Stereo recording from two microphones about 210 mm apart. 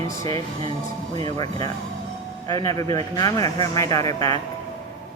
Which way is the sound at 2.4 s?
15° left (ahead or behind).